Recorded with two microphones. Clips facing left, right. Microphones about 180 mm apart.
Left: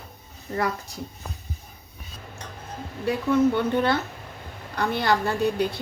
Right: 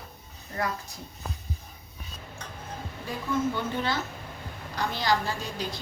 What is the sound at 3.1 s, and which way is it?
A woman's voice, 65° left (ahead or behind).